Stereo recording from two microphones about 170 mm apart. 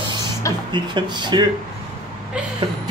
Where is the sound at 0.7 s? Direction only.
25° right (ahead or behind).